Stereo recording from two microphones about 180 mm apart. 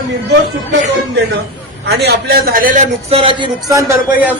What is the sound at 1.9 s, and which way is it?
Speech, 65° right (ahead or behind).